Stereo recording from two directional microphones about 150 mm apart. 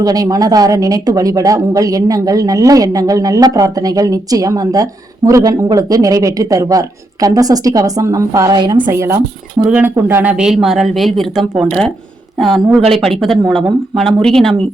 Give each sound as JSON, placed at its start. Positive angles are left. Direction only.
{"t": 0.0, "sound": "speech", "side_deg": -25}
{"t": 8.9, "sound": "speech", "side_deg": -20}
{"t": 9.6, "sound": "speech", "side_deg": -10}
{"t": 10.3, "sound": "speech", "side_deg": -5}
{"t": 12.8, "sound": "speech", "side_deg": -40}
{"t": 13.1, "sound": "speech", "side_deg": 0}